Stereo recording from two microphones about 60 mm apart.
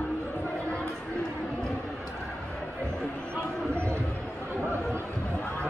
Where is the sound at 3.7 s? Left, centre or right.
Right.